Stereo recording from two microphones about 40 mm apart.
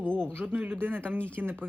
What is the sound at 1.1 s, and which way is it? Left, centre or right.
Speech, right.